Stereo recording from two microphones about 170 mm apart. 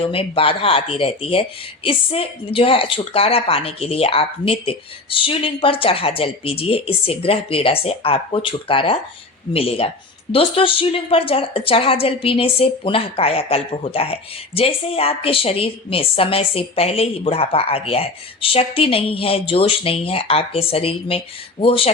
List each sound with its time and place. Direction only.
0.0 s a woman's voice: 35° left (ahead or behind)